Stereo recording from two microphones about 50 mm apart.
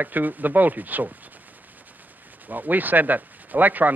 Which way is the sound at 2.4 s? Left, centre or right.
Right.